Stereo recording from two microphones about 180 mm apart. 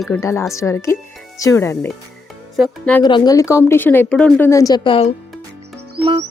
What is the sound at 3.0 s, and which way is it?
Speech, 25° left (ahead or behind).